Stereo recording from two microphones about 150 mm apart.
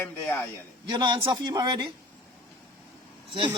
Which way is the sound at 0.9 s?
30° right (ahead or behind).